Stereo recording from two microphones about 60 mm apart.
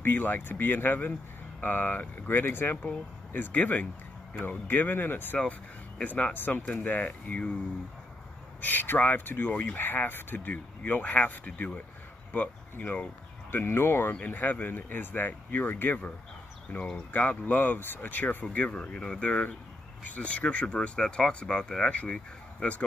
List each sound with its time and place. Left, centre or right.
0.0 s speech: left
3.3 s speech: left
5.4 s speech: centre
8.5 s speech: left
14.2 s speech: left